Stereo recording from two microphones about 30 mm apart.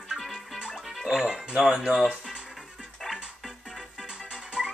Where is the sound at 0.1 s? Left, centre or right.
Centre.